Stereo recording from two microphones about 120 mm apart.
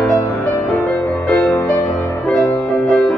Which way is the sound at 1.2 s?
15° left (ahead or behind).